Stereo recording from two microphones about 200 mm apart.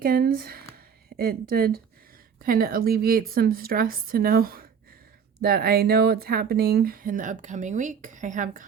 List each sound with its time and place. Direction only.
0.0 s speech: 50° right (ahead or behind)